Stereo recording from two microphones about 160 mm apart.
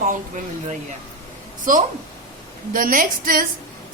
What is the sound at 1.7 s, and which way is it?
A woman's voice, 55° right (ahead or behind).